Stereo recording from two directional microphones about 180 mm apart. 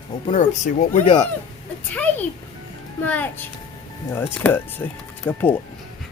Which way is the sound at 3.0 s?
10° left (ahead or behind).